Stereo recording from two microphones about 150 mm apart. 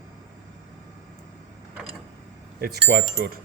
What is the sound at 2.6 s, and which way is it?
Speech, 90° right.